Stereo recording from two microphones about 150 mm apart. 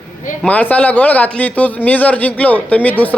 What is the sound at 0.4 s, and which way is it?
A man's voice, 10° left (ahead or behind).